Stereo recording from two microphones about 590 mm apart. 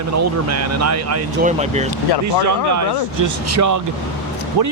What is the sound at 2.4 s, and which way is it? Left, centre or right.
Speech, right.